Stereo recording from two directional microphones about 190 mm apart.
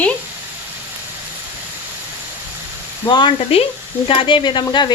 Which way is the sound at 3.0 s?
25° left (ahead or behind).